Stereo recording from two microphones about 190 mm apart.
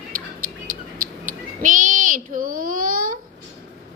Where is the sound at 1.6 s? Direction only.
45° right (ahead or behind).